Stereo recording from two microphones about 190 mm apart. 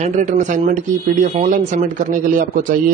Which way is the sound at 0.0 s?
40° right (ahead or behind).